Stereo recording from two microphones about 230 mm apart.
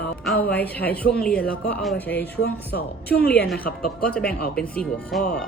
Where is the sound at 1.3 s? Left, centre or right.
Left.